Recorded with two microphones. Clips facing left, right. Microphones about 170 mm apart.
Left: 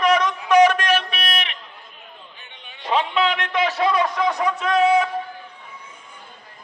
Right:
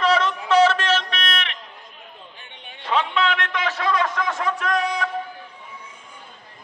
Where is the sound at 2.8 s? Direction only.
15° left (ahead or behind).